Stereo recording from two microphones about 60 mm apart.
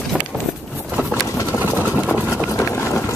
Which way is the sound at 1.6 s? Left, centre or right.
Right.